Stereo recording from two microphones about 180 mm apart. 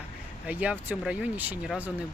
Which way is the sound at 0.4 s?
5° right (ahead or behind).